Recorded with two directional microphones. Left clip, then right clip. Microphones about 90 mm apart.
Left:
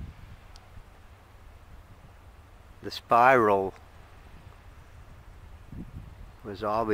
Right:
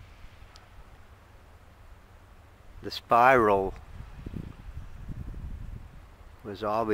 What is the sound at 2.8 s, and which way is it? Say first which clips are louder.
Speech: even; centre (ahead or behind).